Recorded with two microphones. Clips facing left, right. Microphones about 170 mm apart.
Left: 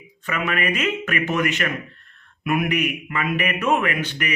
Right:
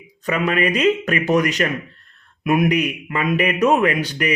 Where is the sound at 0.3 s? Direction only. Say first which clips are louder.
Right 5 dB; 35° right (ahead or behind).